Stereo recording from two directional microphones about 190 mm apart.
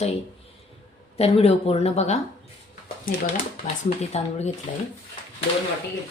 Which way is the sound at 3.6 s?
35° left (ahead or behind).